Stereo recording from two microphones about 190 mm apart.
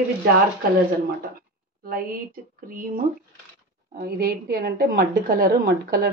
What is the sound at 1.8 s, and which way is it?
A woman's voice, 50° right (ahead or behind).